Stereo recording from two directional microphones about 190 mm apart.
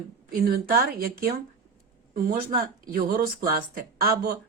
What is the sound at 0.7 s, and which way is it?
Speech, 50° right (ahead or behind).